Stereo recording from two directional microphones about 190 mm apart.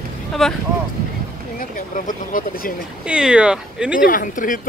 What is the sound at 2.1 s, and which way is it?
Speech, 45° left (ahead or behind).